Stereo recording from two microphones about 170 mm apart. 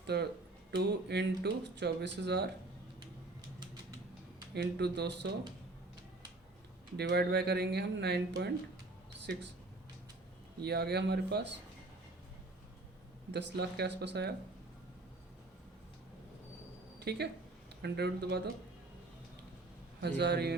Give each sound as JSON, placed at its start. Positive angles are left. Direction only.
{"t": 0.0, "sound": "a sound", "side_deg": -75}
{"t": 0.8, "sound": "speech", "side_deg": -85}
{"t": 4.5, "sound": "speech", "side_deg": -80}
{"t": 6.9, "sound": "speech", "side_deg": -75}
{"t": 10.6, "sound": "speech", "side_deg": -75}
{"t": 13.3, "sound": "speech", "side_deg": -80}
{"t": 17.0, "sound": "speech", "side_deg": -75}
{"t": 20.0, "sound": "speech", "side_deg": -80}